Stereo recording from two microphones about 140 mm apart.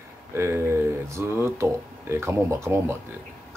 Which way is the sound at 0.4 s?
20° right (ahead or behind).